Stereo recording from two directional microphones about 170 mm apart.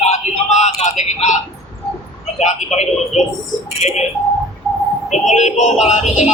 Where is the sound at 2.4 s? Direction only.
40° left (ahead or behind).